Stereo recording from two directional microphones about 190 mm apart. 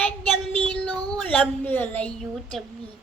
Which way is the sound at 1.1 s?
5° left (ahead or behind).